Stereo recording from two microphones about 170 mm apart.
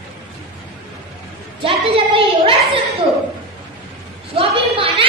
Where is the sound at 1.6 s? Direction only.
30° right (ahead or behind).